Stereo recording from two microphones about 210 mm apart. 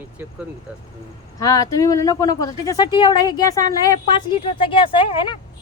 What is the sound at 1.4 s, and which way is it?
Speech, 15° left (ahead or behind).